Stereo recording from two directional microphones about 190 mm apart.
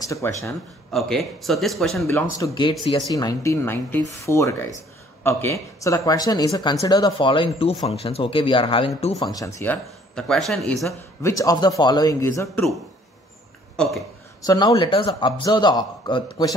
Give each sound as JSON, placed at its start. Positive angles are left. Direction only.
{"t": 0.0, "sound": "a man's voice", "side_deg": 15}
{"t": 0.9, "sound": "speech", "side_deg": 0}
{"t": 2.3, "sound": "a man's voice", "side_deg": 20}
{"t": 10.1, "sound": "speech", "side_deg": 0}
{"t": 11.2, "sound": "a man's voice", "side_deg": 20}
{"t": 14.4, "sound": "speech", "side_deg": 20}